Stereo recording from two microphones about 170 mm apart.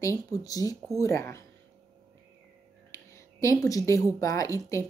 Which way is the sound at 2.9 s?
20° left (ahead or behind).